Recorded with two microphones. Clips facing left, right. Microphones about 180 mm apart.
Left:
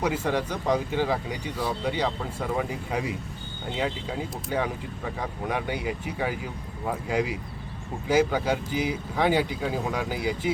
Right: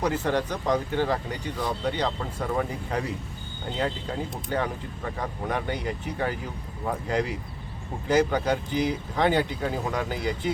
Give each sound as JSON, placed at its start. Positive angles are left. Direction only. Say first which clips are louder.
{"t": 0.0, "sound": "speech", "louder": "right 1 dB", "side_deg": 10}